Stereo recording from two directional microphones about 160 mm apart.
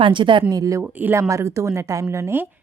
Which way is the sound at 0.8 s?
10° right (ahead or behind).